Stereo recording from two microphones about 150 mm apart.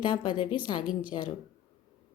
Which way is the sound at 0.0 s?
30° left (ahead or behind).